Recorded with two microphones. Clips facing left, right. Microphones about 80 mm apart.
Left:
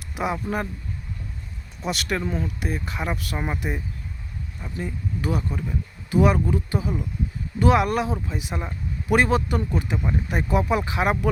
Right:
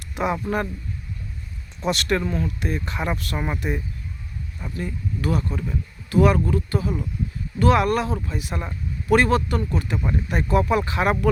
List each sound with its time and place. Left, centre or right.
0.0 s a sound: centre
0.4 s a man's voice: centre
1.8 s speech: centre